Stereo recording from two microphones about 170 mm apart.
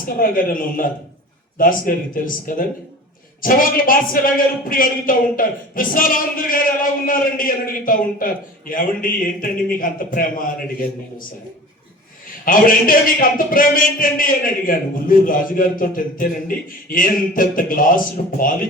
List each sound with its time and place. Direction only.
0.2 s a man's voice: 55° left (ahead or behind)
12.5 s a man's voice: 55° left (ahead or behind)